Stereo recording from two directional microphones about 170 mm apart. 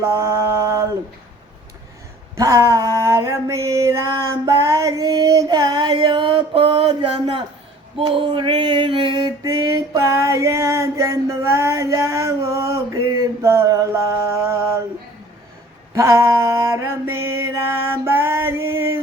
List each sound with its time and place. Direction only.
0.0 s mantra: 15° right (ahead or behind)
2.3 s a sound: 20° right (ahead or behind)
16.0 s mantra: 15° right (ahead or behind)